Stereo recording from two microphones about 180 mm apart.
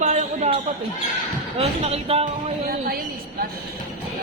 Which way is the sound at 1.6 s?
35° right (ahead or behind).